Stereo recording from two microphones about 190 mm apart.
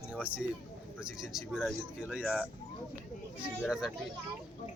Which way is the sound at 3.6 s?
5° right (ahead or behind).